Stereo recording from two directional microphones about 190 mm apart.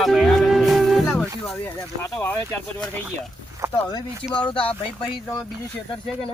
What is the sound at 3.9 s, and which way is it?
Speech, 20° left (ahead or behind).